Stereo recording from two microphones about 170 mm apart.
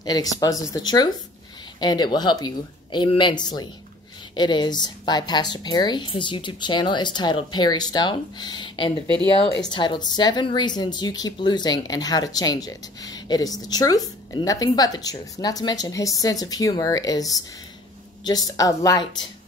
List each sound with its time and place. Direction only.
0.0 s a woman's voice: 25° left (ahead or behind)
9.0 s speech: 25° right (ahead or behind)
9.7 s a woman's voice: 25° left (ahead or behind)